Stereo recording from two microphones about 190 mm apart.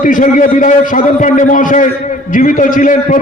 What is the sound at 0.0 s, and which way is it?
A man's voice, 45° left (ahead or behind).